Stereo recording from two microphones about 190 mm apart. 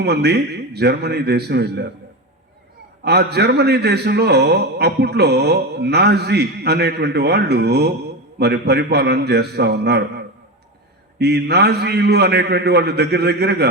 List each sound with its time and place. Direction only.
0.0 s a man's voice: 60° right (ahead or behind)
3.0 s a man's voice: 60° right (ahead or behind)